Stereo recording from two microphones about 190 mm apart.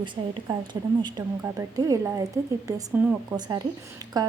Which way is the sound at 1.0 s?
20° right (ahead or behind).